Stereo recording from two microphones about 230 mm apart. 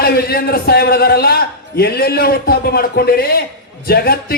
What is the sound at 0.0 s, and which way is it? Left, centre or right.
A man's voice, left.